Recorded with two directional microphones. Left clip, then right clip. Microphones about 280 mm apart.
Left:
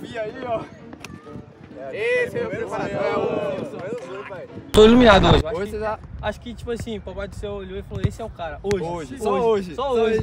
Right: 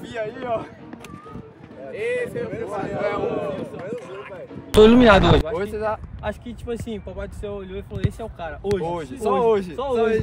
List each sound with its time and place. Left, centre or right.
0.0 s speech: centre
1.9 s speech: left
2.9 s speech: centre